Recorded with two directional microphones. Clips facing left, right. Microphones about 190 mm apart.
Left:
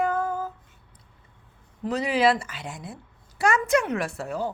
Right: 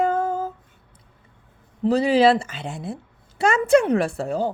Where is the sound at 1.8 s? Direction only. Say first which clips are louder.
Right 6 dB; 30° right (ahead or behind).